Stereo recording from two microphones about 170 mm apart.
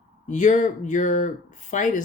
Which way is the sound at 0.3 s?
45° left (ahead or behind).